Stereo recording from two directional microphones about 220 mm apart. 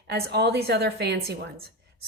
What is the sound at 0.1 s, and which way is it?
A woman's voice, 50° right (ahead or behind).